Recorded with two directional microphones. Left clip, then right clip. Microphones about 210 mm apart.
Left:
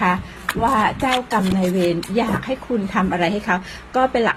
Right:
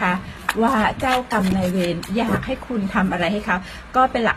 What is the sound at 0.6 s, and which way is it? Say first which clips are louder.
Speech: left 2 dB; 15° left (ahead or behind).